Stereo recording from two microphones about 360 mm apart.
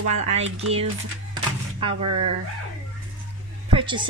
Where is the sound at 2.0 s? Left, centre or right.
Right.